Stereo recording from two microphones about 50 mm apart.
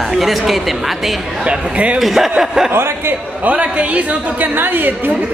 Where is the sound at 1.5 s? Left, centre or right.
Right.